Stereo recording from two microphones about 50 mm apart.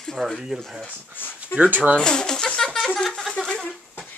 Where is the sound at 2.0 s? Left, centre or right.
Centre.